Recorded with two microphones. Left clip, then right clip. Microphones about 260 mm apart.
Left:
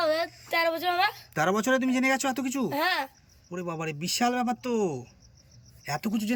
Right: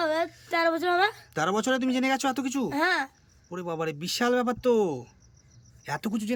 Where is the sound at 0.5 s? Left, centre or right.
Centre.